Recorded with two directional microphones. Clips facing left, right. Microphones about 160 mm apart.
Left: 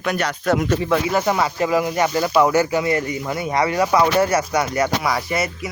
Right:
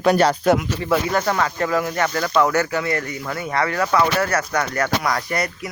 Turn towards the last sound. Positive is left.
turn(degrees=5)  # may be behind; listen again after turning